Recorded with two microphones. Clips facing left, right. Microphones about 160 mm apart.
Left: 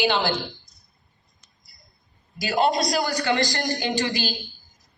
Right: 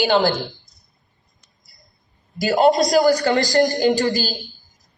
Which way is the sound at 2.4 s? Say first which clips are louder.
Right 6 dB; 45° right (ahead or behind).